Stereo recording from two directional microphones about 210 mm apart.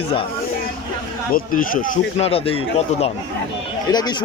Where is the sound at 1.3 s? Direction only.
40° left (ahead or behind).